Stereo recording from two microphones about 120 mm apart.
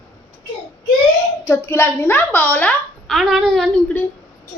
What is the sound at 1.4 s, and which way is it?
A woman's voice, 20° left (ahead or behind).